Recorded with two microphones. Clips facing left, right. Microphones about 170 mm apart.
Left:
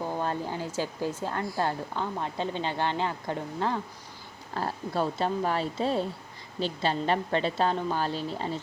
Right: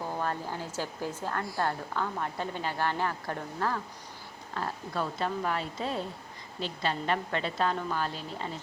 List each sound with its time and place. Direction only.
0.2 s speech: 15° left (ahead or behind)
4.5 s a woman's voice: 30° left (ahead or behind)